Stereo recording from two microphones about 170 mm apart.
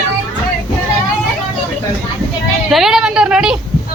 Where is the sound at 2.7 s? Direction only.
Centre (ahead or behind).